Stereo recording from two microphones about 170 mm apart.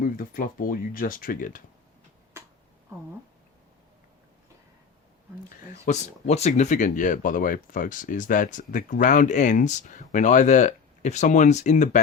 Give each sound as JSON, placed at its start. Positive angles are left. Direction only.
{"t": 0.0, "sound": "speech", "side_deg": 55}
{"t": 5.8, "sound": "speech", "side_deg": 40}